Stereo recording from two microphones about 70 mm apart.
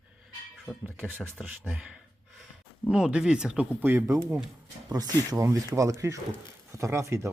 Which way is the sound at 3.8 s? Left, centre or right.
Right.